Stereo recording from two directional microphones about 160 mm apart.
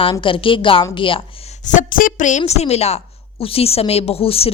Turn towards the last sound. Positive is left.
turn(degrees=35)  # may be behind; listen again after turning